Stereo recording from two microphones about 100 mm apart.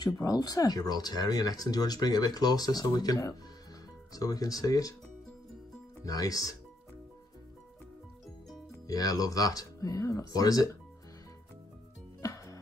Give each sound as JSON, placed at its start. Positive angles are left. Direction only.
{"t": 0.0, "sound": "speech", "side_deg": 40}
{"t": 6.0, "sound": "speech", "side_deg": 40}
{"t": 8.8, "sound": "speech", "side_deg": 40}
{"t": 12.2, "sound": "music", "side_deg": 35}